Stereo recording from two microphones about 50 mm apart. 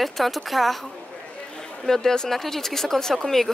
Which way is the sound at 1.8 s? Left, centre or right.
Centre.